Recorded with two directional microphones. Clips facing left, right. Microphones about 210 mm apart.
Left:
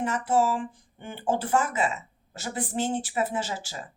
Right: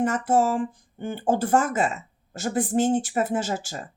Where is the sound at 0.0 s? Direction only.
45° right (ahead or behind).